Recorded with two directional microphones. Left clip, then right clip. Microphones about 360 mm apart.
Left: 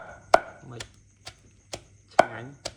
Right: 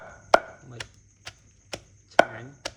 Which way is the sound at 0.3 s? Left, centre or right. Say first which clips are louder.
Even; centre.